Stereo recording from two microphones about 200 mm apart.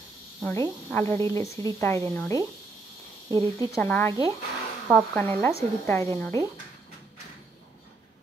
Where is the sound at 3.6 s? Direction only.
10° left (ahead or behind).